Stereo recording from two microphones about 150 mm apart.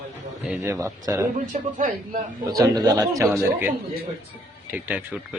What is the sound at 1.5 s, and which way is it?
Speech, 55° right (ahead or behind).